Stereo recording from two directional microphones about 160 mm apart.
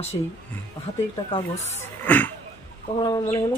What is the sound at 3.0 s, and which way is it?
Speech, 20° left (ahead or behind).